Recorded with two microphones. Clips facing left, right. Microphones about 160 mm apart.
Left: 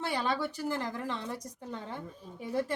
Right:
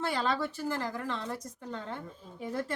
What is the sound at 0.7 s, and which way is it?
Speech, 20° left (ahead or behind).